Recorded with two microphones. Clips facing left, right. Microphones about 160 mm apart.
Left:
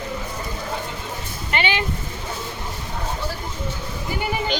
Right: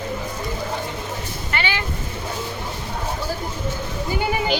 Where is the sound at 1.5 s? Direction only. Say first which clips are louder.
Left 3 dB; 20° left (ahead or behind).